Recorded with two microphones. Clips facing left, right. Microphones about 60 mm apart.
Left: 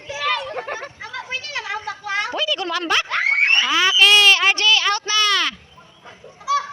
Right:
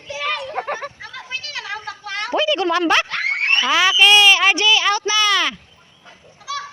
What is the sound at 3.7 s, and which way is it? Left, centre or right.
Speech, centre.